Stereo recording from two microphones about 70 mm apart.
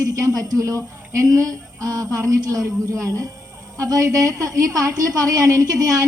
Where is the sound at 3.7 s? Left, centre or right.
Right.